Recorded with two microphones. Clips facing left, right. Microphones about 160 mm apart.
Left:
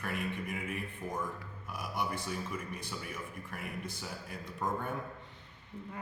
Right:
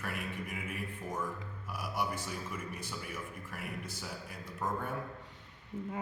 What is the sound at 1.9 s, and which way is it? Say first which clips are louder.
Speech: even; 5° right (ahead or behind).